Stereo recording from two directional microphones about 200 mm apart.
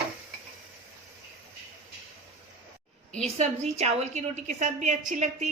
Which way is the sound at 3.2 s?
35° right (ahead or behind).